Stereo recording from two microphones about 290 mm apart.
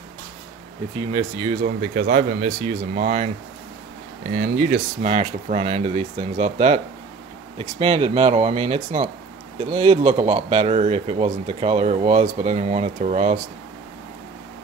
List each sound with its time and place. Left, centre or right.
1.1 s speech: centre
1.6 s speech: right
4.3 s speech: right